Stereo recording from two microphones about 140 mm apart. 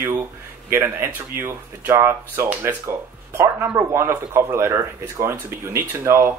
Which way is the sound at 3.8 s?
20° right (ahead or behind).